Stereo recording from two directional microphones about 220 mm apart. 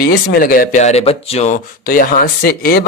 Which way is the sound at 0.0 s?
45° left (ahead or behind).